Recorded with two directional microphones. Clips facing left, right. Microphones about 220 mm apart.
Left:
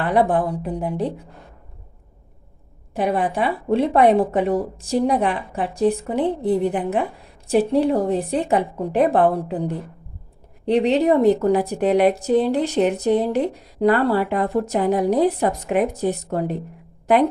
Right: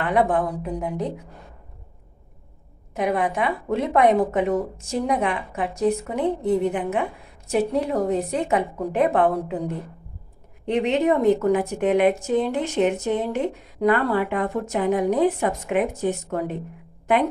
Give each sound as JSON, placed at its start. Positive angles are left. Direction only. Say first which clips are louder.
{"t": 0.0, "sound": "a woman's voice", "louder": "left 2 dB", "side_deg": 35}
{"t": 2.9, "sound": "a woman's voice", "louder": "left 2 dB", "side_deg": 30}
{"t": 10.7, "sound": "a woman's voice", "louder": "left 3 dB", "side_deg": 35}